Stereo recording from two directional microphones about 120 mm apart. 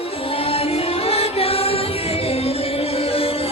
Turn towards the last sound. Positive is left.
turn(degrees=55)  # may be behind; listen again after turning